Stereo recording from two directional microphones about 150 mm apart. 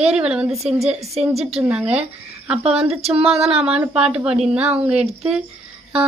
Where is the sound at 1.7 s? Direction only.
5° right (ahead or behind).